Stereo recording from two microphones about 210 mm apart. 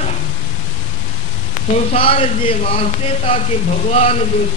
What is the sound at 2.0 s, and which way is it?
Speech, 25° left (ahead or behind).